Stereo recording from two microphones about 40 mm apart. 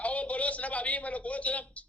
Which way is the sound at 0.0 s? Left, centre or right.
Left.